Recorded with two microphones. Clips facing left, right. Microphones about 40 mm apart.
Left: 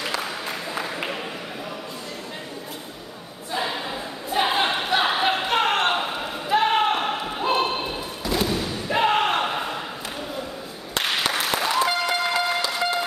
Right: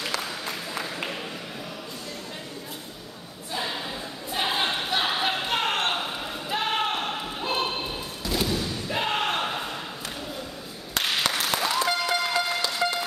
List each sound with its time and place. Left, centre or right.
0.0 s music: centre
3.5 s a sound: centre
11.0 s applause: centre